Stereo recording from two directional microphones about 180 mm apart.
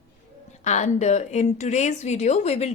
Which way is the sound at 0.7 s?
40° left (ahead or behind).